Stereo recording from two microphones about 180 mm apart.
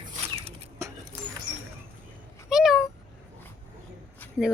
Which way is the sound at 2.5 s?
Centre (ahead or behind).